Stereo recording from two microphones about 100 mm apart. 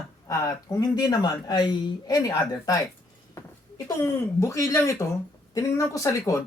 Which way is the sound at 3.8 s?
30° left (ahead or behind).